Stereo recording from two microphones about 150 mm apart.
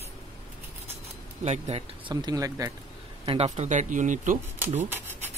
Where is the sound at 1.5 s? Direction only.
45° right (ahead or behind).